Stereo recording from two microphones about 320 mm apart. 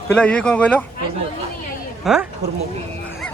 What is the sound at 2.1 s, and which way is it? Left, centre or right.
Speech, centre.